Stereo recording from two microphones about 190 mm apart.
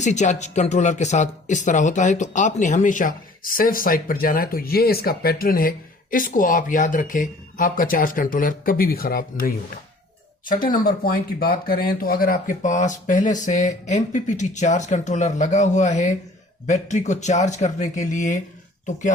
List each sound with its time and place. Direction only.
0.0 s speech: 40° left (ahead or behind)